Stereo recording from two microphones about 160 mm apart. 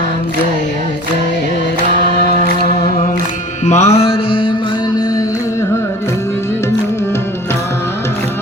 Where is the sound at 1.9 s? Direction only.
80° left.